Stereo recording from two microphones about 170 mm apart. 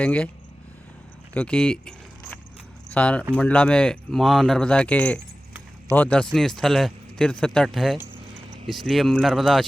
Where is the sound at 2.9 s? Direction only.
5° left (ahead or behind).